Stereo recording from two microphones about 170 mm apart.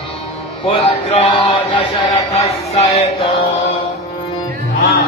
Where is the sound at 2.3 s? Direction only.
35° left (ahead or behind).